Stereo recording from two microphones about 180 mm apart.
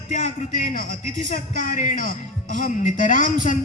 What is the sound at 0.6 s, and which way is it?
Speech, 50° left (ahead or behind).